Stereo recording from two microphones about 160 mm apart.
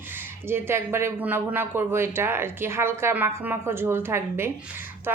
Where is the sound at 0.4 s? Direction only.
15° right (ahead or behind).